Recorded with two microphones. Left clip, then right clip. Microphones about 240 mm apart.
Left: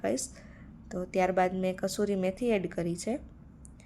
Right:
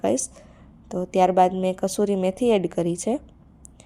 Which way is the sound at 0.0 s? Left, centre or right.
Right.